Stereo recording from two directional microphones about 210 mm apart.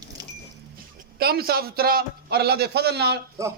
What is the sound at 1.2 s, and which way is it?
A man's voice, 45° right (ahead or behind).